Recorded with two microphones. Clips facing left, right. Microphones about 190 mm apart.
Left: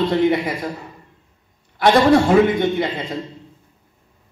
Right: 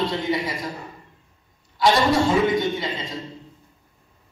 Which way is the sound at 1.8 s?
55° left (ahead or behind).